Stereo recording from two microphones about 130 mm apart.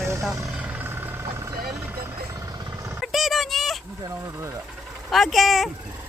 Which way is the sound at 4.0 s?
25° right (ahead or behind).